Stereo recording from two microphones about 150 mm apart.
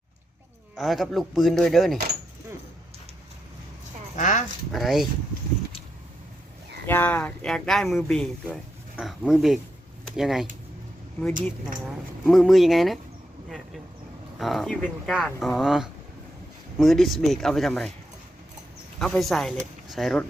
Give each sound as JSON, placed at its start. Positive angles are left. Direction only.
{"t": 0.8, "sound": "speech", "side_deg": 0}
{"t": 4.1, "sound": "a sound", "side_deg": 55}
{"t": 4.7, "sound": "speech", "side_deg": 0}
{"t": 6.8, "sound": "speech", "side_deg": 15}
{"t": 12.2, "sound": "speech", "side_deg": 0}
{"t": 14.3, "sound": "speech", "side_deg": 0}
{"t": 18.9, "sound": "speech", "side_deg": 5}